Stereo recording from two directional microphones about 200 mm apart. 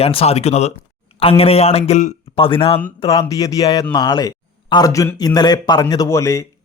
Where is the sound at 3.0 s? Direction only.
20° left (ahead or behind).